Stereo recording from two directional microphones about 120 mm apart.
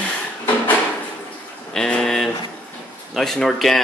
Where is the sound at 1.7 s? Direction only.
5° left (ahead or behind).